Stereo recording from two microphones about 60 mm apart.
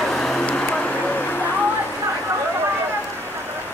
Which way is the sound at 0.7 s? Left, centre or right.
Left.